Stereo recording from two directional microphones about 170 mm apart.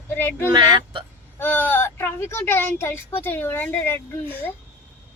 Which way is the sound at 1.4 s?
10° left (ahead or behind).